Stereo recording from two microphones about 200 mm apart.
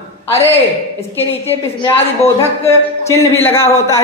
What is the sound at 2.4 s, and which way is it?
A woman's voice, 15° left (ahead or behind).